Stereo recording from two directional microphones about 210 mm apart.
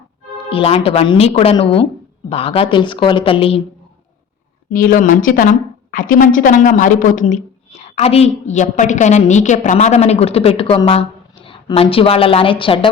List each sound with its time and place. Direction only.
0.5 s a woman's voice: 25° left (ahead or behind)
4.7 s a woman's voice: 40° left (ahead or behind); by 12.9 s 25° left (ahead or behind)